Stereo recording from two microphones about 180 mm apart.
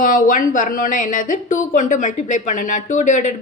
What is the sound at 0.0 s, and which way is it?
Speech, 50° left (ahead or behind).